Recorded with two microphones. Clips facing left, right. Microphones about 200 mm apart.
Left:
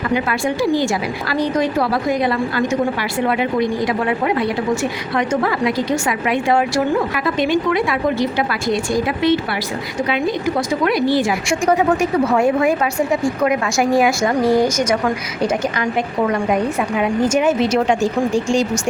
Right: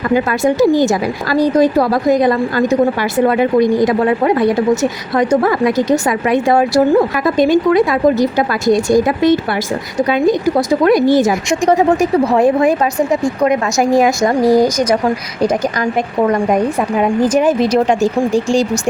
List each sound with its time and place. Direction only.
0.1 s a woman's voice: 40° right (ahead or behind)